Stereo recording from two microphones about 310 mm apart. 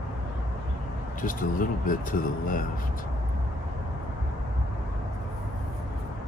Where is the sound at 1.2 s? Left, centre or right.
Left.